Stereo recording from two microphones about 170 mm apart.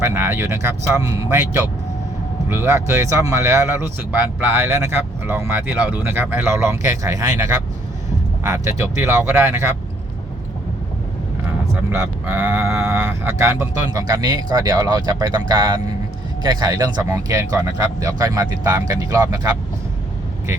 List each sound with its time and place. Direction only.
0.0 s speech: 15° right (ahead or behind)
11.9 s speech: 15° right (ahead or behind)